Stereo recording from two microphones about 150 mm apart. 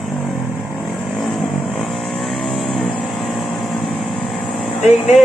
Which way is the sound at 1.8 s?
Centre (ahead or behind).